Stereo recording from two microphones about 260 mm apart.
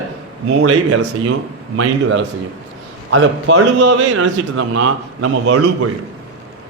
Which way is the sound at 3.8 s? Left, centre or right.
Right.